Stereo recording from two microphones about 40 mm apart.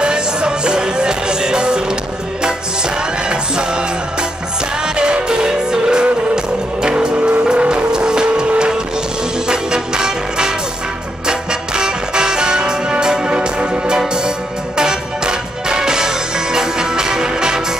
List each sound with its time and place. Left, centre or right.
0.0 s music: right